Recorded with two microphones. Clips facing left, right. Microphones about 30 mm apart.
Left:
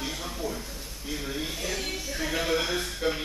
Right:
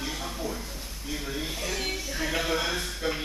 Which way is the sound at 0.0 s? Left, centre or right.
Centre.